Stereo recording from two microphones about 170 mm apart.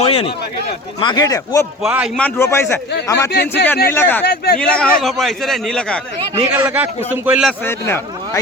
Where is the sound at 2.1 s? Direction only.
10° left (ahead or behind).